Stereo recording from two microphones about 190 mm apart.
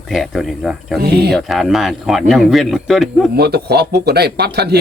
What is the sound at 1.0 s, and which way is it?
Speech, 60° right (ahead or behind).